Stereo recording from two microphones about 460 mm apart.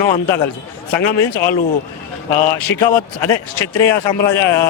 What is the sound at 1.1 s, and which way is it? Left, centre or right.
Speech, left.